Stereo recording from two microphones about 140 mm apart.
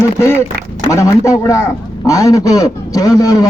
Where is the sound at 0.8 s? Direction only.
25° left (ahead or behind).